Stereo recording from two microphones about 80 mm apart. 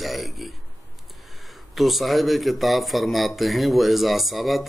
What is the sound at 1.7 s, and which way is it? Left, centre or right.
A man's voice, centre.